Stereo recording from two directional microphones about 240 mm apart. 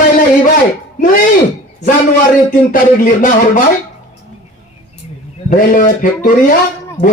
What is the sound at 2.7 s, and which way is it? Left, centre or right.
Speech, left.